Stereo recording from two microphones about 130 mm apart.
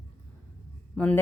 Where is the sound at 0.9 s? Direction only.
10° left (ahead or behind).